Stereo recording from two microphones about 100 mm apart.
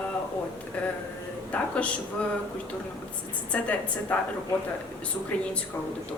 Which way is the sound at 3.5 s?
15° left (ahead or behind).